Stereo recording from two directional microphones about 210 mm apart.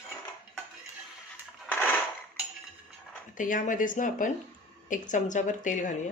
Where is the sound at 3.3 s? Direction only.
40° left (ahead or behind).